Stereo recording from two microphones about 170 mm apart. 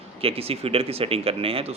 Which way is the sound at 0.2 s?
35° right (ahead or behind).